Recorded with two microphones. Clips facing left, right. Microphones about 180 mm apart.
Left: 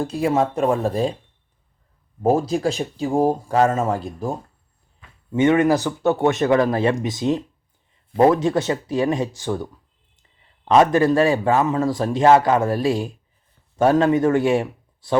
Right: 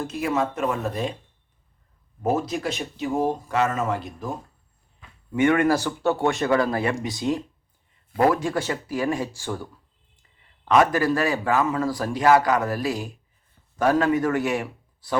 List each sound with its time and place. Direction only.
0.0 s speech: 30° left (ahead or behind)
2.2 s speech: 30° left (ahead or behind)
5.3 s a man's voice: 20° left (ahead or behind)
10.7 s a man's voice: 25° left (ahead or behind)